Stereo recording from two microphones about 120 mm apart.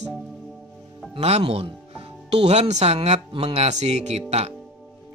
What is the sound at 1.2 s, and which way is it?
Speech, 60° right (ahead or behind).